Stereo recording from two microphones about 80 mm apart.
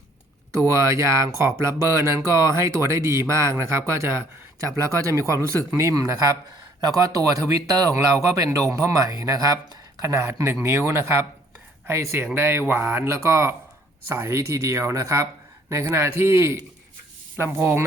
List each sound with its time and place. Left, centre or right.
0.6 s speech: right